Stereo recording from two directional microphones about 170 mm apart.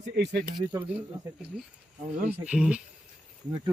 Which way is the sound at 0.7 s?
5° right (ahead or behind).